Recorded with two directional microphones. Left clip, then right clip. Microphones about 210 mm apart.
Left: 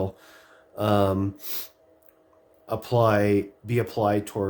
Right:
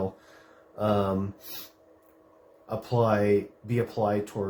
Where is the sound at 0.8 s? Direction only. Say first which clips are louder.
Left 4 dB; 50° left (ahead or behind).